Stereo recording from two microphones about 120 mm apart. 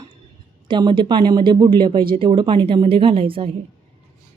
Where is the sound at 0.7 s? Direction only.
40° right (ahead or behind).